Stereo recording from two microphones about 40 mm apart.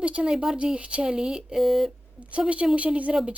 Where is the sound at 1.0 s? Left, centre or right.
Centre.